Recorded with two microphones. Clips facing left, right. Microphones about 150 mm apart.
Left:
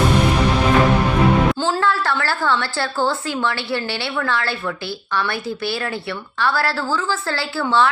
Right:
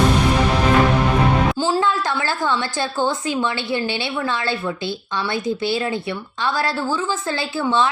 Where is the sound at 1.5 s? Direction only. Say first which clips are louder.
Even; 15° right (ahead or behind).